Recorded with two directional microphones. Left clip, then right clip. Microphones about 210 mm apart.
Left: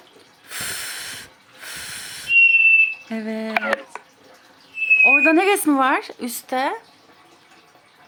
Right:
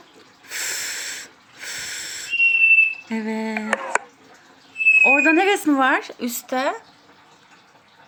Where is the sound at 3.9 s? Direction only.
45° right (ahead or behind).